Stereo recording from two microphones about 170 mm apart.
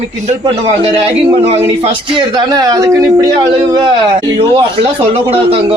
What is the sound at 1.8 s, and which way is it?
Speech, 25° right (ahead or behind).